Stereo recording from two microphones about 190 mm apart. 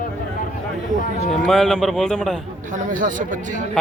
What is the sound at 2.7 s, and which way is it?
Speech, 45° right (ahead or behind).